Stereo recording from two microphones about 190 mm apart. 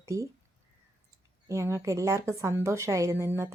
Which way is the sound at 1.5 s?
15° right (ahead or behind).